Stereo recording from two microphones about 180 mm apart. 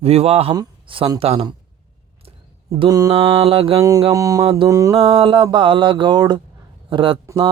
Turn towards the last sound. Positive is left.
turn(degrees=-25)  # may be behind; listen again after turning